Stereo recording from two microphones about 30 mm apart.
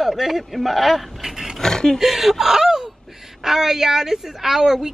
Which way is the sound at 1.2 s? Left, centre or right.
Centre.